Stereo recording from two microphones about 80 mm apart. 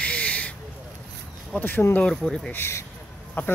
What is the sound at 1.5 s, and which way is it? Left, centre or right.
Speech, left.